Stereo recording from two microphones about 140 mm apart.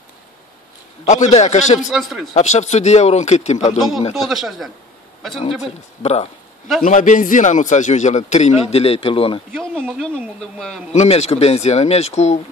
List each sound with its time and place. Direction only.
1.0 s a man's voice: 60° left (ahead or behind)
1.9 s speech: centre (ahead or behind)
2.3 s speech: 55° left (ahead or behind)
4.1 s speech: centre (ahead or behind)
6.8 s a man's voice: 65° left (ahead or behind); by 9.4 s 40° left (ahead or behind)
9.8 s speech: centre (ahead or behind)
10.9 s speech: 50° left (ahead or behind)